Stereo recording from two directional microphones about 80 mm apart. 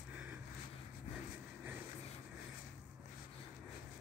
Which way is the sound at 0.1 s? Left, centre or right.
Centre.